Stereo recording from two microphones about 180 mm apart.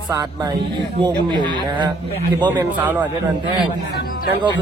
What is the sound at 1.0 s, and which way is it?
Speech, 25° right (ahead or behind).